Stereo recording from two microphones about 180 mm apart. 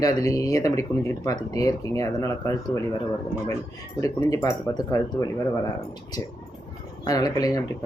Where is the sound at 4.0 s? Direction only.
20° left (ahead or behind).